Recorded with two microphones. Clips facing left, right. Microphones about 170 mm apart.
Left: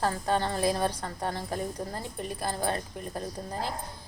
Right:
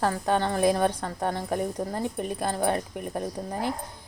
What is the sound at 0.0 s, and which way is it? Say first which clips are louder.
A woman's voice: right 3 dB; 15° right (ahead or behind).